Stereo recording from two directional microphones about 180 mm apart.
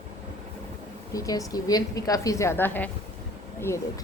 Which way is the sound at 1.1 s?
20° left (ahead or behind).